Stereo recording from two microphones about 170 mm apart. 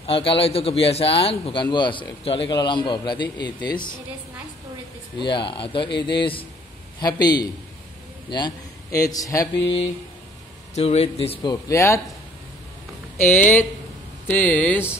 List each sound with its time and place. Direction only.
0.0 s a man's voice: 30° left (ahead or behind)
5.2 s a man's voice: 25° left (ahead or behind)
10.7 s a man's voice: 40° left (ahead or behind)
11.5 s speech: 15° left (ahead or behind)
13.3 s speech: 10° left (ahead or behind)